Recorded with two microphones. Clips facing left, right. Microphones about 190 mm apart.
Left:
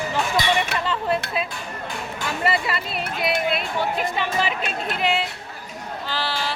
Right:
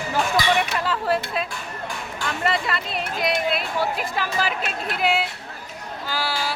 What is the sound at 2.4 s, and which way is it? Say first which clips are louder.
Speech: left 1 dB; 5° left (ahead or behind).